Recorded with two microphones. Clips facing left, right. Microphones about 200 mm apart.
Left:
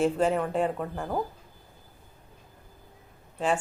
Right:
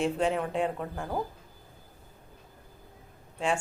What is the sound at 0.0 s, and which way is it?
A woman's voice, centre (ahead or behind).